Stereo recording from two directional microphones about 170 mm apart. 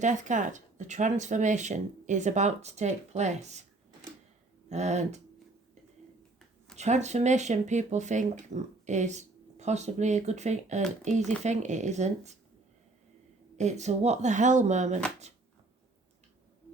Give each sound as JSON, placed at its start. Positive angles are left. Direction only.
{"t": 0.0, "sound": "speech", "side_deg": -45}
{"t": 4.7, "sound": "speech", "side_deg": -45}
{"t": 6.7, "sound": "speech", "side_deg": -40}
{"t": 13.6, "sound": "speech", "side_deg": -40}